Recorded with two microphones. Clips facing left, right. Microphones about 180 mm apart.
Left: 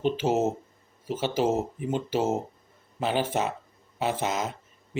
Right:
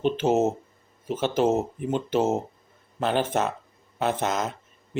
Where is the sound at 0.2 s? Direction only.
10° left (ahead or behind).